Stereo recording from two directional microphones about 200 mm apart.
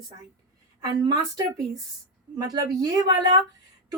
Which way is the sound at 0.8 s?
20° right (ahead or behind).